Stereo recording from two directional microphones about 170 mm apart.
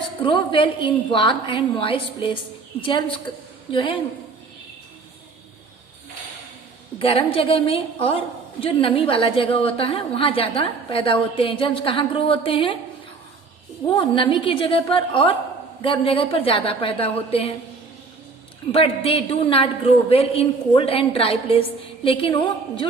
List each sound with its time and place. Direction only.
0.2 s a woman's voice: 30° left (ahead or behind)
3.7 s a woman's voice: 30° left (ahead or behind)
7.0 s a woman's voice: 35° left (ahead or behind)
13.9 s a woman's voice: 30° left (ahead or behind)
18.7 s a woman's voice: 35° left (ahead or behind)